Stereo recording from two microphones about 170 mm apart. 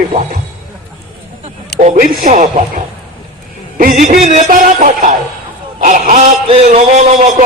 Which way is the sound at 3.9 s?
50° right (ahead or behind).